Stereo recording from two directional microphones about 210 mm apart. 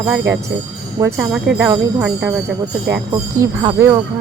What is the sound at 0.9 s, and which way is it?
Speech, 15° right (ahead or behind).